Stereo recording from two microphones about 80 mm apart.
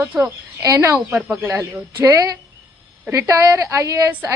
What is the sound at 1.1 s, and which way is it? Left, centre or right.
Speech, centre.